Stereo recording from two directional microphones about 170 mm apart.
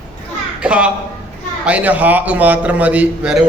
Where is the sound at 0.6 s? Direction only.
5° right (ahead or behind).